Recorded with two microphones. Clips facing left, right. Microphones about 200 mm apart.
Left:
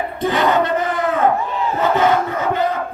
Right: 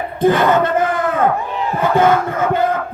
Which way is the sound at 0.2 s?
50° right (ahead or behind).